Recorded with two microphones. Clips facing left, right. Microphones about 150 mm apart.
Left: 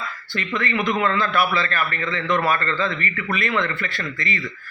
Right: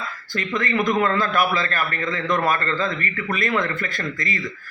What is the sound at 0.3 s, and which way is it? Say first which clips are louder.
A man's voice: right 1 dB; 40° right (ahead or behind).